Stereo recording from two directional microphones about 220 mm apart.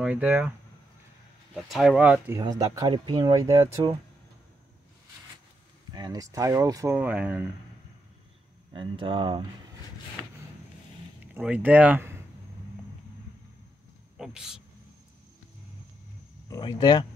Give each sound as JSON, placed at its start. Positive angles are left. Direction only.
{"t": 0.0, "sound": "speech", "side_deg": -5}
{"t": 1.5, "sound": "speech", "side_deg": 0}
{"t": 2.2, "sound": "speech", "side_deg": -15}
{"t": 5.9, "sound": "speech", "side_deg": -15}
{"t": 8.7, "sound": "speech", "side_deg": -25}
{"t": 11.3, "sound": "speech", "side_deg": -5}
{"t": 14.1, "sound": "speech", "side_deg": -5}
{"t": 16.4, "sound": "speech", "side_deg": 15}